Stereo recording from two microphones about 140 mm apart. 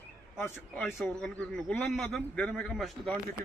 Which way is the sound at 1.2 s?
5° left (ahead or behind).